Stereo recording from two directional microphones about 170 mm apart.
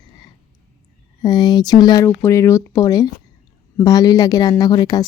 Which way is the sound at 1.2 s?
25° left (ahead or behind).